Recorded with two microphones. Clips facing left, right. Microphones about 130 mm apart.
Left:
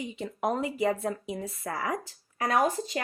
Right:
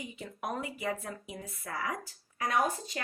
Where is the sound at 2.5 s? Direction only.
90° left.